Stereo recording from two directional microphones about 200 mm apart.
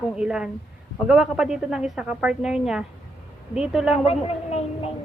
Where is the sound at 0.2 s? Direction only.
5° right (ahead or behind).